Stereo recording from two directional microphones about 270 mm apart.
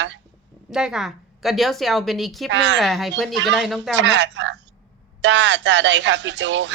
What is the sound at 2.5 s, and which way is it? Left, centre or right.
Speech, right.